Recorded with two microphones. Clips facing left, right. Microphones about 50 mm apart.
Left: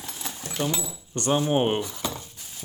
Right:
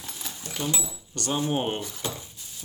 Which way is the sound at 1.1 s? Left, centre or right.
Left.